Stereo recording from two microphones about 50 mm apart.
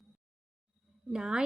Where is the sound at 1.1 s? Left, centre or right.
Centre.